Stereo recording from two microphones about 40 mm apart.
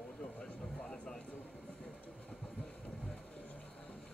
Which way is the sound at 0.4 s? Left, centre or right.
Centre.